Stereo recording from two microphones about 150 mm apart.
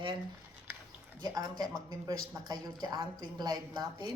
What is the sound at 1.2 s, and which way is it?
Speech, 25° right (ahead or behind).